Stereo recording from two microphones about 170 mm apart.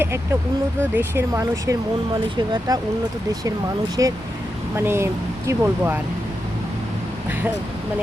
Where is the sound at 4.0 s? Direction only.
20° right (ahead or behind).